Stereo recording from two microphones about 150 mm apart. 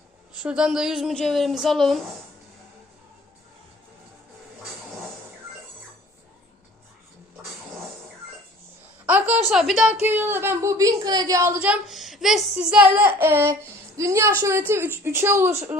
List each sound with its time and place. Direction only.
0.4 s a woman's voice: 5° right (ahead or behind)
9.0 s a woman's voice: 10° right (ahead or behind)